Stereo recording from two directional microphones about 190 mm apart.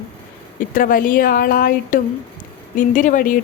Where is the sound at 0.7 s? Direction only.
45° left (ahead or behind).